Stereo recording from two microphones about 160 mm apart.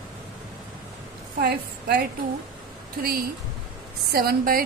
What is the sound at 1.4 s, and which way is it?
Speech, 80° right.